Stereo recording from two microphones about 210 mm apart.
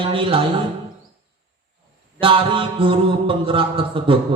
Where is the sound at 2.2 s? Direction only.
25° right (ahead or behind).